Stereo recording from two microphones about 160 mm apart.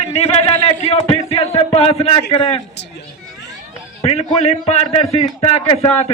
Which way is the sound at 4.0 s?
40° left (ahead or behind).